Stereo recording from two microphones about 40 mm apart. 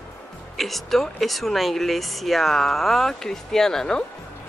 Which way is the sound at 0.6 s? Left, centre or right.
Centre.